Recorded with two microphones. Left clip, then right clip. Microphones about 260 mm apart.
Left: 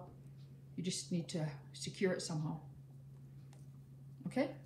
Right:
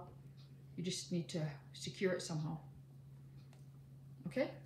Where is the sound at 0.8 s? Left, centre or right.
Centre.